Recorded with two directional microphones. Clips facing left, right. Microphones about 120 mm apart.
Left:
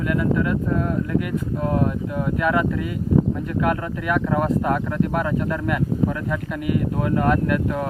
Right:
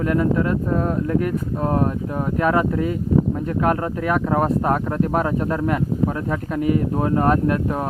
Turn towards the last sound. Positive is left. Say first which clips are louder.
# right 1 dB
turn(degrees=-30)  # may be behind; listen again after turning